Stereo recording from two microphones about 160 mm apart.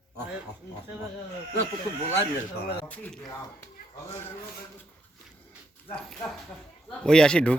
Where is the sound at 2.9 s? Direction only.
10° left (ahead or behind).